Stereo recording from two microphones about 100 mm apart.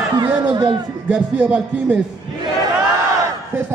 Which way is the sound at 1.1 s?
15° right (ahead or behind).